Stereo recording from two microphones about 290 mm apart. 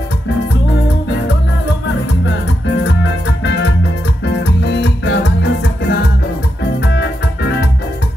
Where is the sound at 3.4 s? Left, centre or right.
Left.